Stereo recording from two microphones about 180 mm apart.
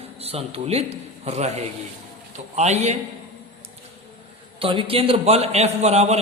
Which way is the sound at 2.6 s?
40° right (ahead or behind).